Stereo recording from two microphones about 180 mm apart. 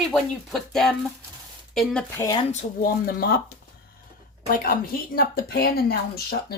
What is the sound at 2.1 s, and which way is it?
Speech, 15° left (ahead or behind).